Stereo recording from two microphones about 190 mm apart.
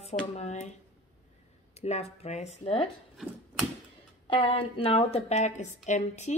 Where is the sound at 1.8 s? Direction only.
35° left (ahead or behind).